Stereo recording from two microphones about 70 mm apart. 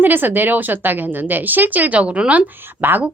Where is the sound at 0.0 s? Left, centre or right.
Right.